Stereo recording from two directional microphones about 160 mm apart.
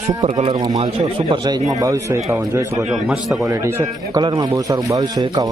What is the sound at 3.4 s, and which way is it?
Speech, 15° right (ahead or behind).